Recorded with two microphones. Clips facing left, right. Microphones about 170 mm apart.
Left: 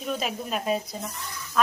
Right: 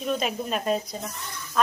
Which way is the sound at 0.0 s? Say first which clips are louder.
Right 3 dB; centre (ahead or behind).